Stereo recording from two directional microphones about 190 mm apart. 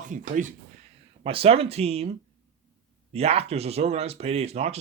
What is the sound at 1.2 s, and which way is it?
Speech, 30° right (ahead or behind).